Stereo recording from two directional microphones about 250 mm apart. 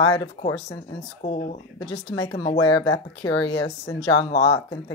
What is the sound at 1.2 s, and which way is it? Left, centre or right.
Speech, left.